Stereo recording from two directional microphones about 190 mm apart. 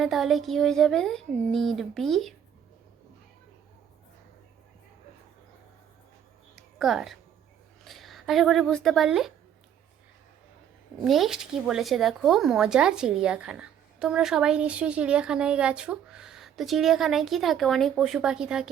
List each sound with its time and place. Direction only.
0.0 s a woman's voice: centre (ahead or behind)
6.6 s a sound: centre (ahead or behind)
7.9 s speech: centre (ahead or behind)
11.0 s a woman's voice: centre (ahead or behind)